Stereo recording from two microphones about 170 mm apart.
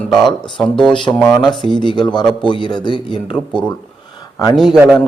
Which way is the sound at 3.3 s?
5° left (ahead or behind).